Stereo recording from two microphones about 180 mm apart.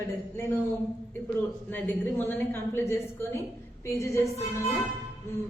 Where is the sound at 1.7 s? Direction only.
10° left (ahead or behind).